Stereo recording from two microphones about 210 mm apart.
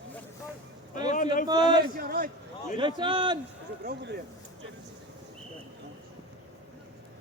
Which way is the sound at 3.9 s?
50° right (ahead or behind).